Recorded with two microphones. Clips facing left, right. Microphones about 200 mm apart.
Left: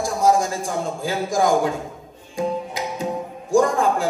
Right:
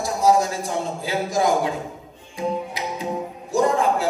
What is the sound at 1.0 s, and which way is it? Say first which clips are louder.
Speech: left 1 dB; 50° left (ahead or behind).